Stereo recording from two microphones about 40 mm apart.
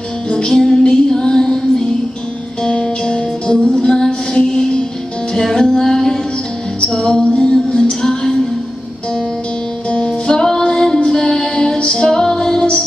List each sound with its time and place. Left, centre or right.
0.5 s music: centre
9.8 s music: left
10.6 s female singing: centre